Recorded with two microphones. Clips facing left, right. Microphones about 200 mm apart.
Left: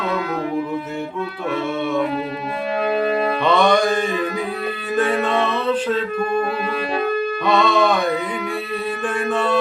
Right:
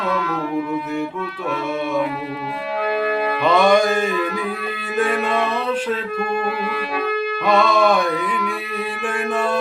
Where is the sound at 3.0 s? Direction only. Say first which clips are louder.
Left 1 dB; 25° left (ahead or behind).